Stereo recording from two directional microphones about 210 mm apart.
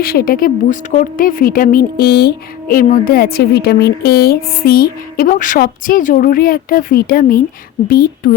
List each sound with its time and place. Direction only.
0.0 s a woman's voice: 45° left (ahead or behind)